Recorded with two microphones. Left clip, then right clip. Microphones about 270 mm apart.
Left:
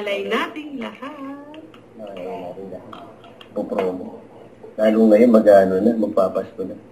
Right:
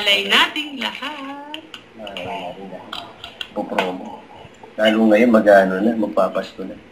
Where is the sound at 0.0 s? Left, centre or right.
Centre.